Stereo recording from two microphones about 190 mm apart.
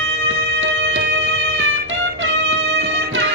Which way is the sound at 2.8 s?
75° right (ahead or behind).